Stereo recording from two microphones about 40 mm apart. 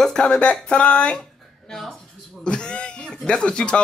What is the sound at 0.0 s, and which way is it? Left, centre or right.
Speech, left.